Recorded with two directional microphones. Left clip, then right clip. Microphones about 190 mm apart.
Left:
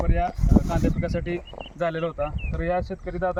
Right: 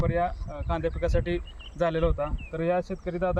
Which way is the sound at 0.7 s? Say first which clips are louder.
Left 1 dB; 20° right (ahead or behind).